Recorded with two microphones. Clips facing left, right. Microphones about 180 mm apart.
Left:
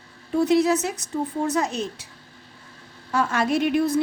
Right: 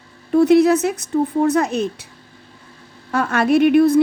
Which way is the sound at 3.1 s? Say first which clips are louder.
Right 6 dB; 60° right (ahead or behind).